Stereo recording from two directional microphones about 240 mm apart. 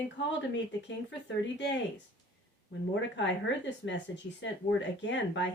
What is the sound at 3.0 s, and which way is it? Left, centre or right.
Speech, left.